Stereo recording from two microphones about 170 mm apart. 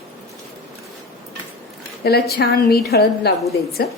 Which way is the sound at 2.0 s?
65° left (ahead or behind).